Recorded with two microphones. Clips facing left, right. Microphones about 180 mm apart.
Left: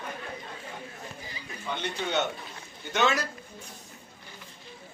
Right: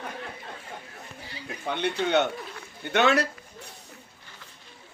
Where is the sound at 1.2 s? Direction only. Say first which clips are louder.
Right 5 dB; 65° right (ahead or behind).